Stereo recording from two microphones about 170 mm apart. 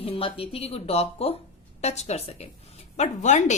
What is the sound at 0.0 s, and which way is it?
A woman's voice, 35° left (ahead or behind).